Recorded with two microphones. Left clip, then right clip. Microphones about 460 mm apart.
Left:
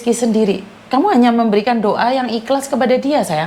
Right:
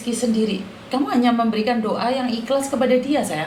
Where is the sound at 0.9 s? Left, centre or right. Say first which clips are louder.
Left 7 dB; left.